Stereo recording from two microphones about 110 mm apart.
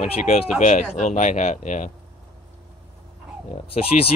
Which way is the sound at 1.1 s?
90° left.